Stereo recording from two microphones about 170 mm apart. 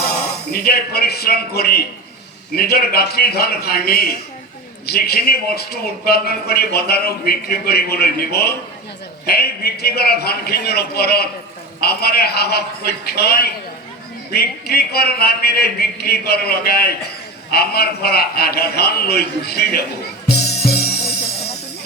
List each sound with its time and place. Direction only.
0.5 s a man's voice: 65° left (ahead or behind)
20.2 s music: 70° left (ahead or behind)